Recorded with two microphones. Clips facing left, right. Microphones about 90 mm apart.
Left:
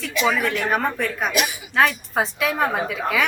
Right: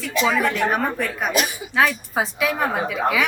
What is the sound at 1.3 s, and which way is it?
Speech, 35° right (ahead or behind).